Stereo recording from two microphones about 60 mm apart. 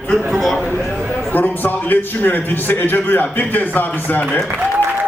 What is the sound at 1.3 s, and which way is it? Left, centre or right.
A man's voice, left.